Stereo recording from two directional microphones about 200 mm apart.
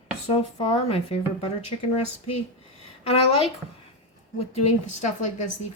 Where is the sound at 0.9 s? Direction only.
30° left (ahead or behind).